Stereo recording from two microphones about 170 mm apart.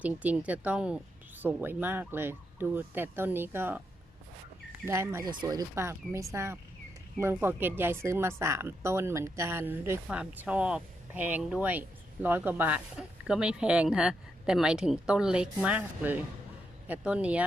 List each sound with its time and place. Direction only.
0.0 s speech: 10° right (ahead or behind)
4.9 s speech: 15° right (ahead or behind)